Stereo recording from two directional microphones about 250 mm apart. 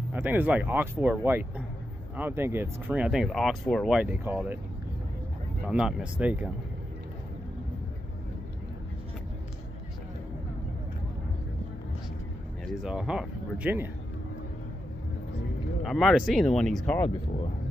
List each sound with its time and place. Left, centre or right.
0.1 s speech: centre
5.7 s speech: centre
12.8 s speech: centre
15.8 s speech: centre